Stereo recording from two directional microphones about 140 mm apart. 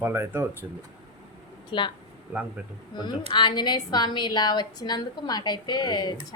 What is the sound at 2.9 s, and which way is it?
A woman's voice, 30° left (ahead or behind).